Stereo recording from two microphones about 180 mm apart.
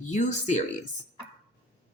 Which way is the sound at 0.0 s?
40° left (ahead or behind).